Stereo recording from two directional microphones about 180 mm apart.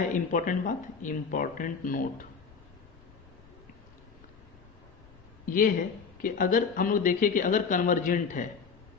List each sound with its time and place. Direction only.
0.1 s speech: 45° left (ahead or behind)
5.5 s speech: 50° left (ahead or behind)